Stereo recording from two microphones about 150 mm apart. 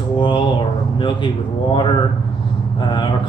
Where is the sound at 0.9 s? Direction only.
35° left (ahead or behind).